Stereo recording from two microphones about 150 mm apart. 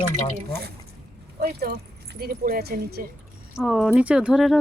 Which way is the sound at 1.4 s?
90° right.